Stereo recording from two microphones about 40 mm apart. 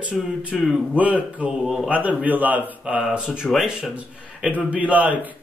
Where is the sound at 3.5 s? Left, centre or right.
Centre.